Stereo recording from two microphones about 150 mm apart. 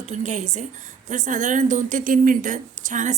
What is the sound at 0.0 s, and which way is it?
A woman's voice, 50° right (ahead or behind).